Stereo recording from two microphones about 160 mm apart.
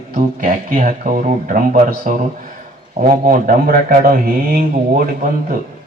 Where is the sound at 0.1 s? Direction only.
60° right (ahead or behind).